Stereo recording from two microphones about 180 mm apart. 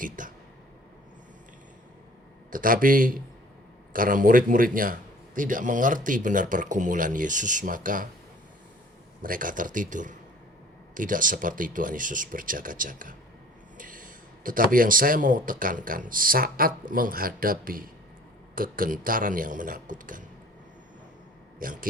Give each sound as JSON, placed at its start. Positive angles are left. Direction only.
{"t": 0.2, "sound": "a sound", "side_deg": -50}
{"t": 2.5, "sound": "a man's voice", "side_deg": -50}
{"t": 9.2, "sound": "a man's voice", "side_deg": -50}
{"t": 21.6, "sound": "a man's voice", "side_deg": -50}